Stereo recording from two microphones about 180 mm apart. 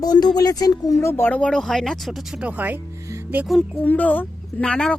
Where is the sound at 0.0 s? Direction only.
20° left (ahead or behind).